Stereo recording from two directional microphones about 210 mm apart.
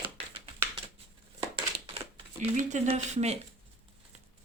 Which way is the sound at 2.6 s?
35° right (ahead or behind).